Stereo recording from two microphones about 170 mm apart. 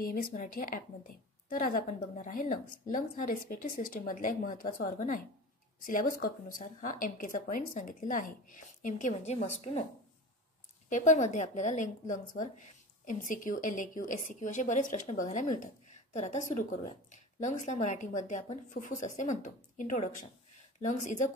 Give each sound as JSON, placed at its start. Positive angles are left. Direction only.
{"t": 0.0, "sound": "a woman's voice", "side_deg": 55}
{"t": 10.9, "sound": "a woman's voice", "side_deg": 45}